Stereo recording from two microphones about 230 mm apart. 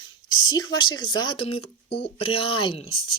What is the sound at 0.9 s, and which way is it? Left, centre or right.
Speech, centre.